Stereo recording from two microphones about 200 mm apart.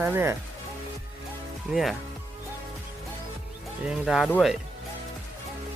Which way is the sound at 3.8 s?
5° right (ahead or behind).